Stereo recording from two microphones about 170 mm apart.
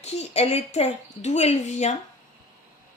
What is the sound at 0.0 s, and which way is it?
A woman's voice, 40° left (ahead or behind).